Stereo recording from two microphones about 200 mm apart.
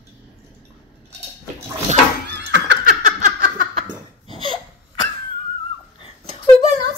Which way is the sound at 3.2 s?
45° right (ahead or behind).